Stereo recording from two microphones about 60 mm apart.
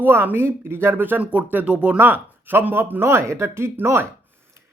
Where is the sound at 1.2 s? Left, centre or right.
Right.